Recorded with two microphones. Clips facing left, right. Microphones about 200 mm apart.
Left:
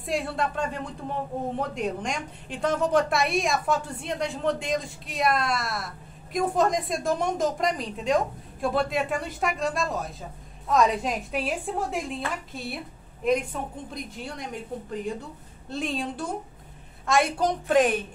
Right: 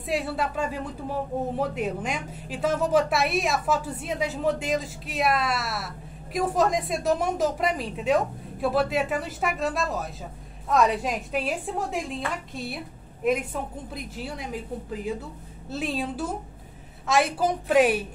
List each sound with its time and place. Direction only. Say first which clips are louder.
0.0 s a woman's voice: even; 5° right (ahead or behind)